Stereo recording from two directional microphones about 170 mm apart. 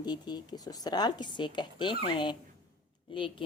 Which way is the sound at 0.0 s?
25° left (ahead or behind).